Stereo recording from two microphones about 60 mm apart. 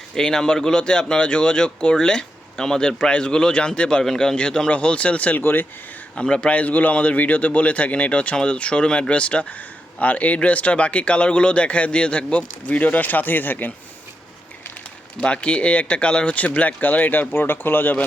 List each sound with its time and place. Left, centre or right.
0.1 s speech: centre
5.4 s speech: left
6.1 s a man's voice: centre; by 13.7 s left
15.2 s a man's voice: centre